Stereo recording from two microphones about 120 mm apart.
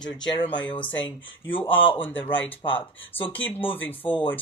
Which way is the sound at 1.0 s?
45° left (ahead or behind).